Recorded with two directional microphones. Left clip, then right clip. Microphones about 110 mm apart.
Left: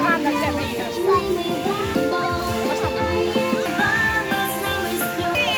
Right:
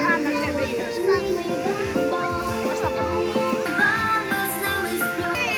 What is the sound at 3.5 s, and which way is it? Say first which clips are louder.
Music: even; 15° right (ahead or behind).